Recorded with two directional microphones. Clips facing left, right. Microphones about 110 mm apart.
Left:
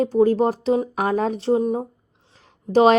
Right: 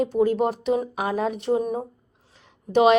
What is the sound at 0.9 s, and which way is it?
A woman's voice, 45° left (ahead or behind).